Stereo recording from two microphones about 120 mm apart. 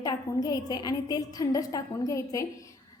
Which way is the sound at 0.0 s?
35° left (ahead or behind).